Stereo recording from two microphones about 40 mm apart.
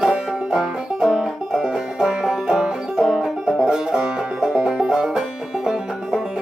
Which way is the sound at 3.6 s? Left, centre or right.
Centre.